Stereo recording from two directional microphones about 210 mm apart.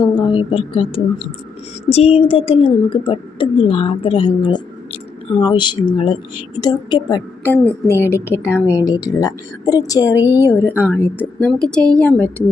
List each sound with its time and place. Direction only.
0.0 s a woman's voice: 20° left (ahead or behind)
10.7 s a woman's voice: 10° right (ahead or behind)
10.9 s a woman's voice: 10° left (ahead or behind)